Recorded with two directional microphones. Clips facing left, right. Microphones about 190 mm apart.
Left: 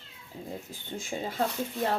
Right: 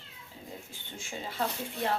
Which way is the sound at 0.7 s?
40° left (ahead or behind).